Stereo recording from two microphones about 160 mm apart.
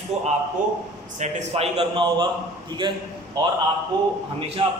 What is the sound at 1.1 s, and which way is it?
A man's voice, 45° right (ahead or behind).